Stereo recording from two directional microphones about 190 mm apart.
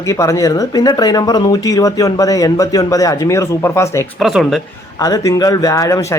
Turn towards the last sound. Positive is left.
turn(degrees=20)  # may be behind; listen again after turning